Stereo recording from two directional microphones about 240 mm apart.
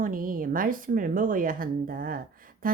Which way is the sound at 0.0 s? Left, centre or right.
Right.